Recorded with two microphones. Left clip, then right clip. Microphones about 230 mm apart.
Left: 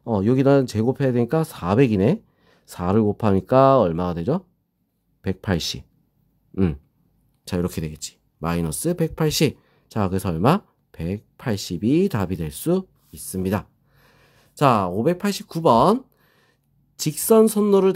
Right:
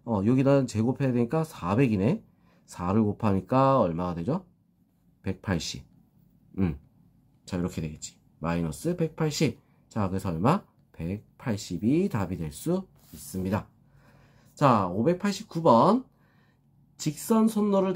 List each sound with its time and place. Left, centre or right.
0.0 s speech: left
7.4 s speech: left